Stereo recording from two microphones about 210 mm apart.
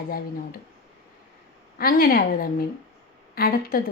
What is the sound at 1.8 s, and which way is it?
Speech, 45° left (ahead or behind).